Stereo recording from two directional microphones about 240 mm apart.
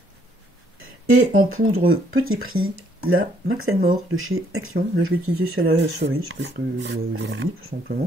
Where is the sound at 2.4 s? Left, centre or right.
Right.